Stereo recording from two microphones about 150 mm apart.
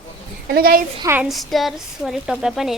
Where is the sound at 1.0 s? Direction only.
15° right (ahead or behind).